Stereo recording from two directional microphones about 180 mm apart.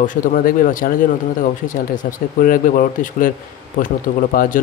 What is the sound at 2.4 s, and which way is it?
Speech, 50° left (ahead or behind).